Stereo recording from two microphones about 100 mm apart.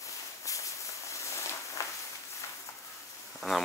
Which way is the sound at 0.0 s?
30° left (ahead or behind).